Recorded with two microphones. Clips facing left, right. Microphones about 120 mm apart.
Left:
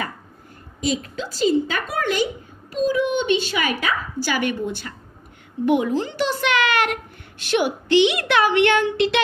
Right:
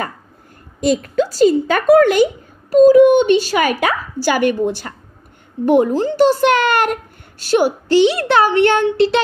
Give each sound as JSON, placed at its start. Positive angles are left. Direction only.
{"t": 0.7, "sound": "a woman's voice", "side_deg": -55}